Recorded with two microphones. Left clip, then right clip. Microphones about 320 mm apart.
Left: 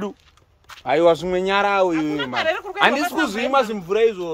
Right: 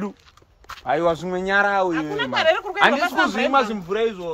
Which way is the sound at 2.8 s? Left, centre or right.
Left.